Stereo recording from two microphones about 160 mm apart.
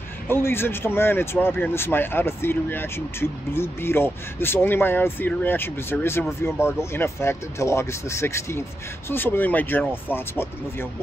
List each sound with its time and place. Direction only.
0.3 s speech: 15° left (ahead or behind)